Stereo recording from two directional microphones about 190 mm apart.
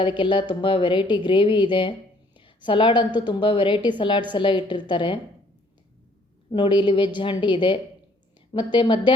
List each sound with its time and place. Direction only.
0.0 s a woman's voice: 25° left (ahead or behind)
6.5 s a woman's voice: 25° left (ahead or behind)